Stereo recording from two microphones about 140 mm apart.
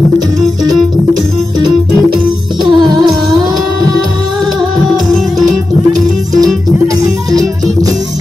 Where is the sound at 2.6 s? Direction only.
30° right (ahead or behind).